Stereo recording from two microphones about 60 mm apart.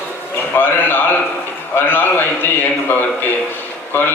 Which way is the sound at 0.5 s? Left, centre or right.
Left.